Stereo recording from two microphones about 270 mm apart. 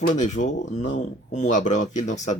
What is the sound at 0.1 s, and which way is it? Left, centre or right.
Speech, left.